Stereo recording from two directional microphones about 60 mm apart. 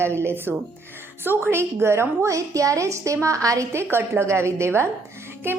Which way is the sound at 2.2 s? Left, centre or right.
Right.